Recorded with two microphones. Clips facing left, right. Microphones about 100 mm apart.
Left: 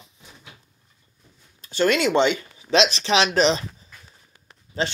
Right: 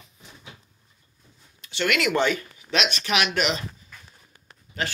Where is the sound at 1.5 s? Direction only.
35° left (ahead or behind).